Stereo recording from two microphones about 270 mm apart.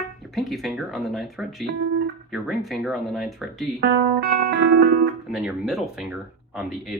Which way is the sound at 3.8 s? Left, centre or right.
Right.